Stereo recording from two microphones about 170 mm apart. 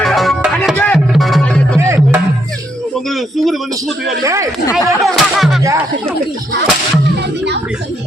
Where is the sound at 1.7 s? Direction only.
15° right (ahead or behind).